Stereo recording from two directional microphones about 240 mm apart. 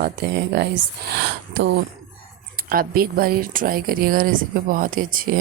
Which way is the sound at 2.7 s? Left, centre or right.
Right.